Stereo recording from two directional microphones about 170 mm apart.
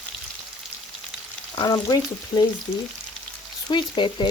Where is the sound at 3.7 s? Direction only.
25° left (ahead or behind).